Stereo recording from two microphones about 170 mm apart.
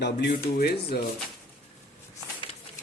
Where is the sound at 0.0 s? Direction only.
80° left.